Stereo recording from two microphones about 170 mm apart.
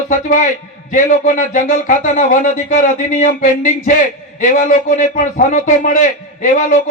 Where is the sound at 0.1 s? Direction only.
50° left (ahead or behind).